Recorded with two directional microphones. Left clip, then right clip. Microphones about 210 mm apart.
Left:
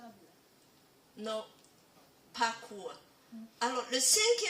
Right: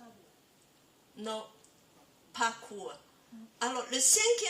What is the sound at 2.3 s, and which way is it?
Speech, 35° right (ahead or behind).